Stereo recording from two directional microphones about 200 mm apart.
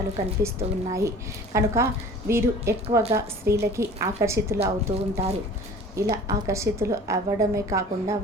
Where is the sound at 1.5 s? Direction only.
15° right (ahead or behind).